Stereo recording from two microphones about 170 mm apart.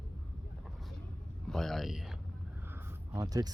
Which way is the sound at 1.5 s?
Centre (ahead or behind).